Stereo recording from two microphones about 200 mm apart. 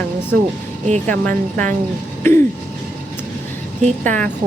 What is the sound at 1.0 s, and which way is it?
Speech, 5° left (ahead or behind).